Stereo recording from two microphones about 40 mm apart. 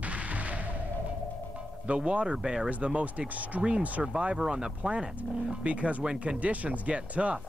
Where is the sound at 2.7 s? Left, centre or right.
Right.